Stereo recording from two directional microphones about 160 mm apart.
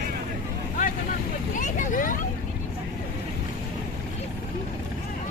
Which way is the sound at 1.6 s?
55° left (ahead or behind).